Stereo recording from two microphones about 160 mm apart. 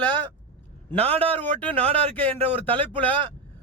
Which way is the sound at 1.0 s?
40° right (ahead or behind).